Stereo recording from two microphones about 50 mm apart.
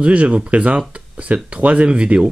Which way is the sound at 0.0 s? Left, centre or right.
Right.